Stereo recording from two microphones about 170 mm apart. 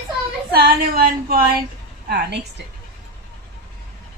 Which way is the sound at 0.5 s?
60° right (ahead or behind).